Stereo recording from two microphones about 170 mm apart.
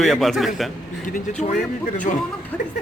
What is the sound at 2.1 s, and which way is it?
Speech, 40° left (ahead or behind).